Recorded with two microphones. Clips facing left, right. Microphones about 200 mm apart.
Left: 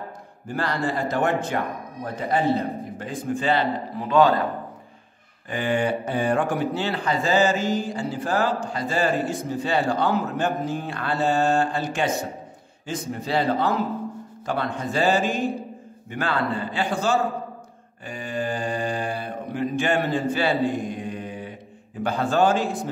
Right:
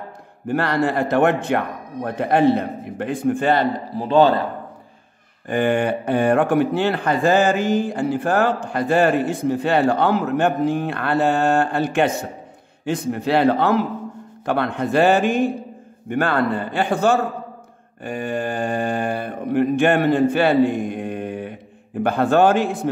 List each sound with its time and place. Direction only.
0.5 s speech: 65° right (ahead or behind)
3.9 s a man's voice: 30° right (ahead or behind)
5.5 s speech: 55° right (ahead or behind)